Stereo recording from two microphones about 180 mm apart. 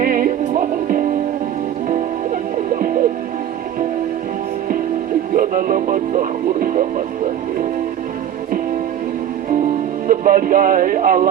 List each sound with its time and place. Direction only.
0.0 s music: 50° right (ahead or behind)
5.3 s music: 50° right (ahead or behind)
10.1 s music: 50° right (ahead or behind)